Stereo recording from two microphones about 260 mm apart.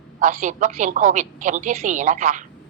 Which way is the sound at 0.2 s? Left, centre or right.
Right.